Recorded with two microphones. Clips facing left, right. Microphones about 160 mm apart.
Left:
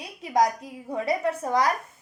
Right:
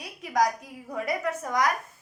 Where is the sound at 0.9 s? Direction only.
25° left (ahead or behind).